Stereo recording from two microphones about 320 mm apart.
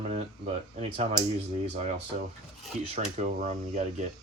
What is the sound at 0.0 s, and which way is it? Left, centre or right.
Speech, right.